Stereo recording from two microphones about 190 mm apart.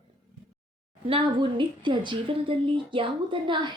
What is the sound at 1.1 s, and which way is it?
A woman's voice, 25° right (ahead or behind).